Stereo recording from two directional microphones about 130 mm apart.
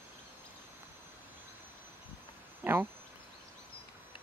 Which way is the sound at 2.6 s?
15° right (ahead or behind).